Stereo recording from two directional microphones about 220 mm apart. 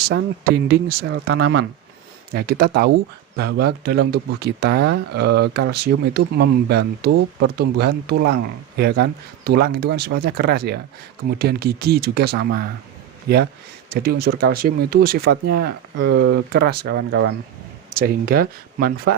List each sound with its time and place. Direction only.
0.1 s speech: 50° right (ahead or behind)
17.9 s speech: 40° right (ahead or behind)